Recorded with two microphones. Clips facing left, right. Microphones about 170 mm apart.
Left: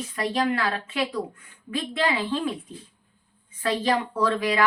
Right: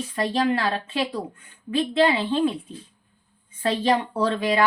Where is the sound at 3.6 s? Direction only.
30° right (ahead or behind).